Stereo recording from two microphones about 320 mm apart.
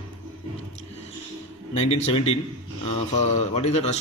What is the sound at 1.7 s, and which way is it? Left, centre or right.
A man's voice, centre.